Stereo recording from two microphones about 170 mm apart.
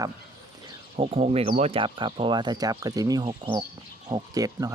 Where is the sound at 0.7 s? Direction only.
35° right (ahead or behind).